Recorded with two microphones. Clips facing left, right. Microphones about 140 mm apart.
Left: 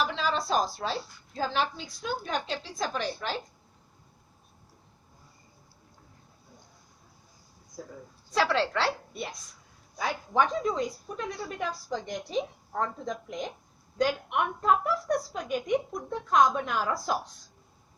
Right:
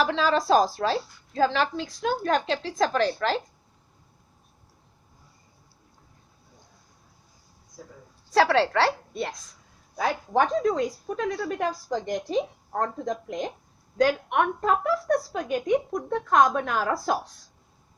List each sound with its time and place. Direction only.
0.0 s a woman's voice: 90° right
8.3 s a woman's voice: 75° right (ahead or behind)
10.0 s a woman's voice: 70° right (ahead or behind)
11.9 s a woman's voice: 45° right (ahead or behind)
14.0 s a woman's voice: 75° right (ahead or behind)
16.7 s a woman's voice: 50° right (ahead or behind)